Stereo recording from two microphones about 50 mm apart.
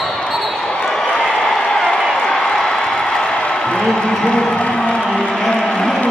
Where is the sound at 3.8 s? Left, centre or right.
Centre.